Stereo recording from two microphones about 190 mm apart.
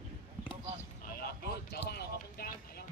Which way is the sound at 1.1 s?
50° left (ahead or behind).